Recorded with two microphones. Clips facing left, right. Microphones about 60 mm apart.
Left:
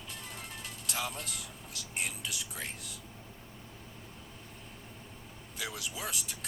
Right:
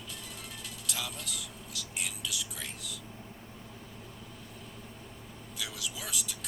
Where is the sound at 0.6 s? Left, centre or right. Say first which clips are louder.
Left 2 dB; left.